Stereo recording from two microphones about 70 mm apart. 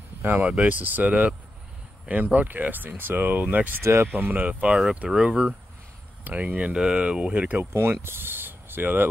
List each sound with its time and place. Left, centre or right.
0.2 s speech: right
3.8 s speech: right
4.2 s speech: right
6.2 s speech: right
7.5 s speech: right